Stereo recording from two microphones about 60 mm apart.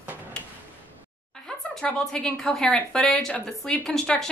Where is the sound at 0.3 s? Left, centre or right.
Centre.